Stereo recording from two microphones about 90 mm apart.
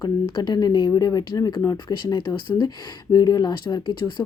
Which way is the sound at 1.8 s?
55° left (ahead or behind).